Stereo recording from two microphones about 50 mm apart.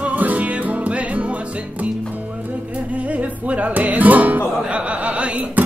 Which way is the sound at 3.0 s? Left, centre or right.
Right.